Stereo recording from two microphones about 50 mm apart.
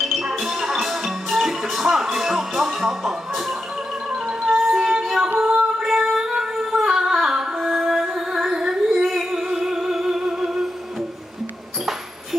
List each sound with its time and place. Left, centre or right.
0.0 s music: centre
4.1 s music: centre
5.4 s female singing: centre
5.8 s music: centre
6.1 s a sound: centre
6.8 s humming: centre
8.1 s music: centre